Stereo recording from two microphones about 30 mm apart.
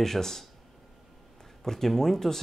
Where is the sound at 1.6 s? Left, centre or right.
Centre.